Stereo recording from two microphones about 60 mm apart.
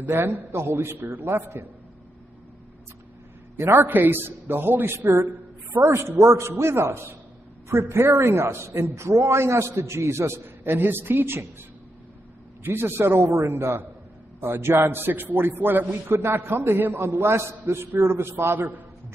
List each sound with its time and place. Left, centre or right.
0.0 s a man's voice: right
3.5 s a man's voice: right
12.6 s a man's voice: right
14.4 s a man's voice: right